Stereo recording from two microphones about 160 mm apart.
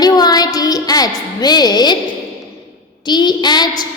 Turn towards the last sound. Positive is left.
turn(degrees=25)  # may be behind; listen again after turning